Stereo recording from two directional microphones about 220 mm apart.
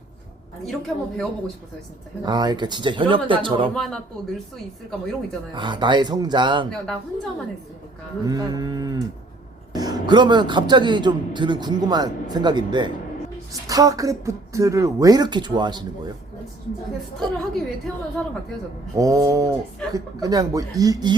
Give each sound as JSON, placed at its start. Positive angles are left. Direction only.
{"t": 0.6, "sound": "speech", "side_deg": 0}
{"t": 2.2, "sound": "a man's voice", "side_deg": -20}
{"t": 3.8, "sound": "speech", "side_deg": 0}
{"t": 5.5, "sound": "a man's voice", "side_deg": -20}
{"t": 6.7, "sound": "speech", "side_deg": 0}
{"t": 8.2, "sound": "a man's voice", "side_deg": -15}
{"t": 17.3, "sound": "speech", "side_deg": 0}
{"t": 18.9, "sound": "speech", "side_deg": -15}